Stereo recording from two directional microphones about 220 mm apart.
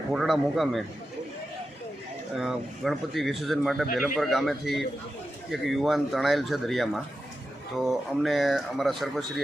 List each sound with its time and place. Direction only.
0.1 s a man's voice: centre (ahead or behind)
2.3 s a man's voice: centre (ahead or behind)